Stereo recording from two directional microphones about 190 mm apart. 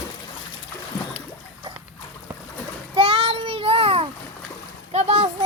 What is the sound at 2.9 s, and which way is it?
Child singing, 30° right (ahead or behind).